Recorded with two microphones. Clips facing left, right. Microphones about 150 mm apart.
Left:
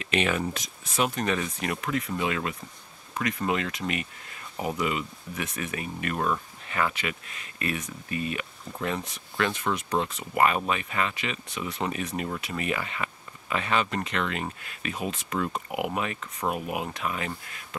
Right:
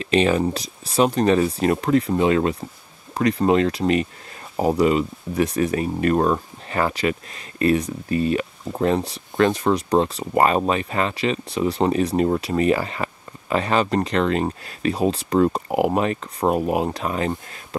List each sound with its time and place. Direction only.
0.0 s speech: 30° right (ahead or behind)